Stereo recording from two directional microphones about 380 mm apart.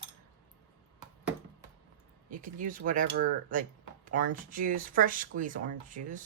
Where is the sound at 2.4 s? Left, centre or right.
Right.